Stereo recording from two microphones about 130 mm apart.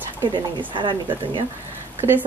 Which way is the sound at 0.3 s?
40° right (ahead or behind).